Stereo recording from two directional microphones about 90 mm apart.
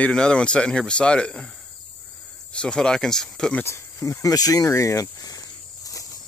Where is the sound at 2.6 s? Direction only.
10° left (ahead or behind).